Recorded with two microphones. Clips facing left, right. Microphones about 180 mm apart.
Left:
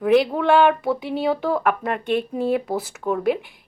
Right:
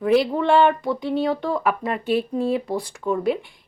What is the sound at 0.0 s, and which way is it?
A woman's voice, centre (ahead or behind).